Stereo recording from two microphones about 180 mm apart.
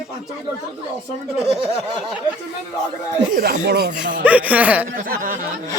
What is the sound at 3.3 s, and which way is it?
Speech, 50° right (ahead or behind).